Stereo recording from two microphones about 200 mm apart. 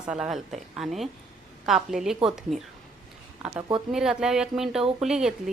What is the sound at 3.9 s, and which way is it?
A woman's voice, centre (ahead or behind).